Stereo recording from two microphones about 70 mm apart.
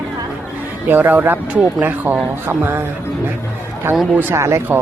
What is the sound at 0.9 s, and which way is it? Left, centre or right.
Speech, right.